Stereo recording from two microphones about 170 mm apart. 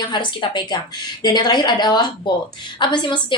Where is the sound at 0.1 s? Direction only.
25° left (ahead or behind).